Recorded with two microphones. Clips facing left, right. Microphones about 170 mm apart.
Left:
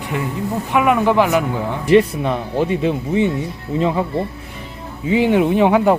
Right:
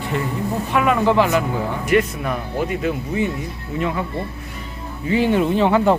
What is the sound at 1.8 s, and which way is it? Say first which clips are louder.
Speech: left 6 dB; 30° left (ahead or behind).